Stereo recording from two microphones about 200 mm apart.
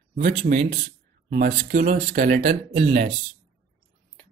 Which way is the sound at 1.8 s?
35° right (ahead or behind).